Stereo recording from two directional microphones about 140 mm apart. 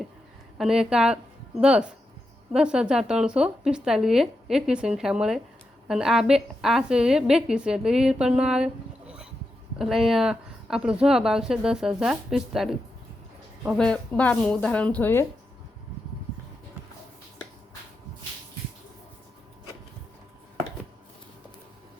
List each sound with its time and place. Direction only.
0.6 s a woman's voice: 5° right (ahead or behind); by 15.3 s 15° left (ahead or behind)